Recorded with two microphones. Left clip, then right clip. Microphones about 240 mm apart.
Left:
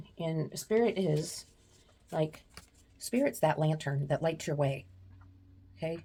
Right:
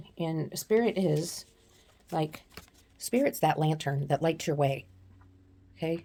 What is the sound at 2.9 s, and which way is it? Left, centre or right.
Speech, right.